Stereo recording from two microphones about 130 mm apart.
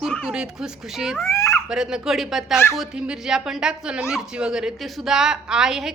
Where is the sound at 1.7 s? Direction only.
5° right (ahead or behind).